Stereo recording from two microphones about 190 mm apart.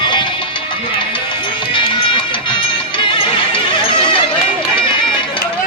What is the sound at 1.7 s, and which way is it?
Music, 25° left (ahead or behind).